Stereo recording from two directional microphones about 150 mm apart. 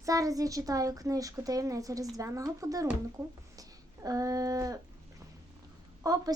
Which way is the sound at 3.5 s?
25° right (ahead or behind).